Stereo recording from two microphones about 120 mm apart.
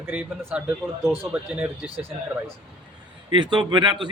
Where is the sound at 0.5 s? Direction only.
10° right (ahead or behind).